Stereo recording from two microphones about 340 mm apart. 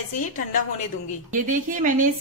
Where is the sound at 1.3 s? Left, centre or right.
Right.